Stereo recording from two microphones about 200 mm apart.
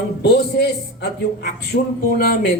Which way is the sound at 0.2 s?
55° left (ahead or behind).